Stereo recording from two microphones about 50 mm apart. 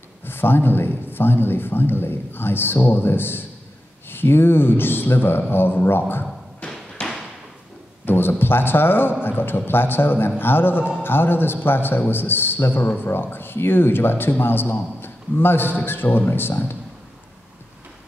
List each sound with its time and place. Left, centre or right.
0.2 s a man's voice: left
8.0 s a man's voice: left